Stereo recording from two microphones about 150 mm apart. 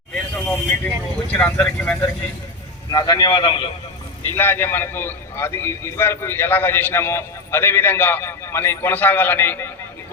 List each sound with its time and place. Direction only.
0.1 s vehicle: 10° left (ahead or behind)
1.3 s a man's voice: 10° left (ahead or behind)
2.9 s a man's voice: 25° left (ahead or behind)
4.3 s a man's voice: 15° left (ahead or behind)